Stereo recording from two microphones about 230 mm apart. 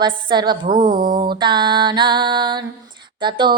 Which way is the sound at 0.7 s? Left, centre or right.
Right.